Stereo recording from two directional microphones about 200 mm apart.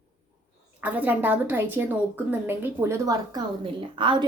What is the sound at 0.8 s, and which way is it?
A woman's voice, 10° right (ahead or behind).